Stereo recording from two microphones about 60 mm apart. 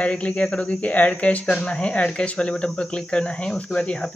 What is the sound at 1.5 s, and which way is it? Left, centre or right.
Speech, centre.